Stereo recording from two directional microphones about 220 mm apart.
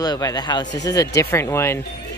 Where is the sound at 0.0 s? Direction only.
20° left (ahead or behind).